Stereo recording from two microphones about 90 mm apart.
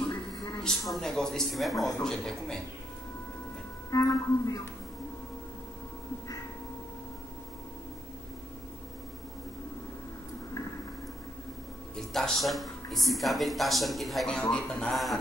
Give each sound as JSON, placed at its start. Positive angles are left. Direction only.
{"t": 0.7, "sound": "speech", "side_deg": 5}
{"t": 3.9, "sound": "speech", "side_deg": 40}
{"t": 12.0, "sound": "speech", "side_deg": 5}